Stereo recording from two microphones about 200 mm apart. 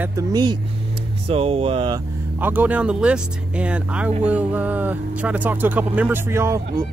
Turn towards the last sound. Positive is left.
turn(degrees=-15)  # may be behind; listen again after turning